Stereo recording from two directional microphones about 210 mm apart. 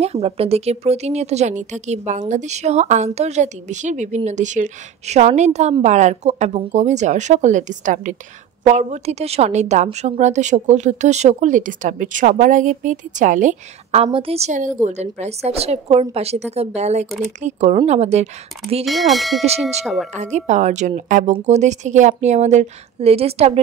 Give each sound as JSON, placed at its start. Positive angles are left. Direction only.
{"t": 0.0, "sound": "speech", "side_deg": -30}
{"t": 18.9, "sound": "speech", "side_deg": 0}
{"t": 20.1, "sound": "speech", "side_deg": -35}